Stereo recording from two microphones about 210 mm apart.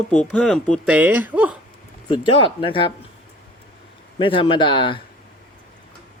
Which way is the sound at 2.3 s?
25° left (ahead or behind).